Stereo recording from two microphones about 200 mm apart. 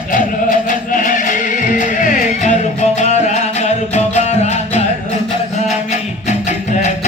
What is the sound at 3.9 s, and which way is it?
Music, 35° left (ahead or behind).